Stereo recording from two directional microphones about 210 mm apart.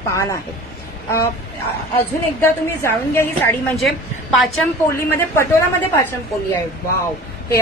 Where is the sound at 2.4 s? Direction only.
10° left (ahead or behind).